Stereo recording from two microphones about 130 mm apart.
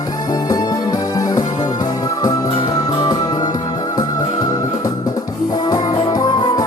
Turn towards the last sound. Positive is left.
turn(degrees=30)  # may be behind; listen again after turning